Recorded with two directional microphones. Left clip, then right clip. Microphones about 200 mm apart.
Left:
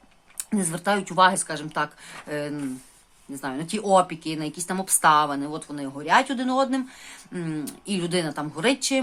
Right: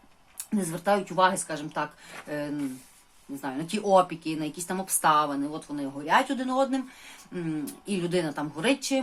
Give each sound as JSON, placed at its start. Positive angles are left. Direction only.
{"t": 0.3, "sound": "speech", "side_deg": 30}